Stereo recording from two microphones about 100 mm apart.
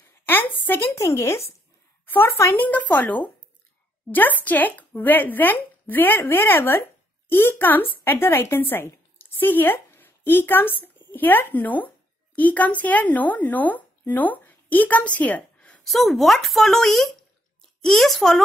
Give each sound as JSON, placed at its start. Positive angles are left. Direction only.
{"t": 0.2, "sound": "a sound", "side_deg": 20}
{"t": 0.9, "sound": "speech", "side_deg": 30}
{"t": 15.8, "sound": "speech", "side_deg": 0}